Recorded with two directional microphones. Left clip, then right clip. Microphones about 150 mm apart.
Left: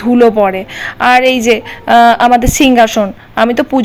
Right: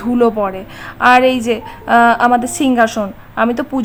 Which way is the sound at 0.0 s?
15° left (ahead or behind).